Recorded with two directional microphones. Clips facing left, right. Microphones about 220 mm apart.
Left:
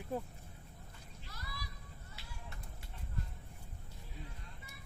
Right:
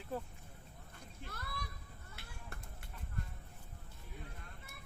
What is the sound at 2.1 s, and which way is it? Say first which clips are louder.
Music: right 2 dB; 55° right (ahead or behind).